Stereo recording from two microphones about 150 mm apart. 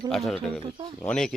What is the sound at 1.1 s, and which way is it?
Speech, 5° left (ahead or behind).